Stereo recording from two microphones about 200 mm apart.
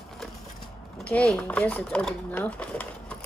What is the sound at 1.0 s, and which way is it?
Speech, 5° left (ahead or behind).